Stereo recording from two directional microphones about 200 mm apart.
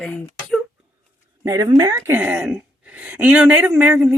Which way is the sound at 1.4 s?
20° right (ahead or behind).